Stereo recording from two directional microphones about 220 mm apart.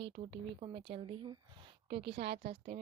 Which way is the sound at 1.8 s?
50° right (ahead or behind).